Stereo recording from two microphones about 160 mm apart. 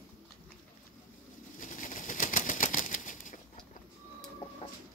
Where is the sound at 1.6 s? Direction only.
55° left (ahead or behind).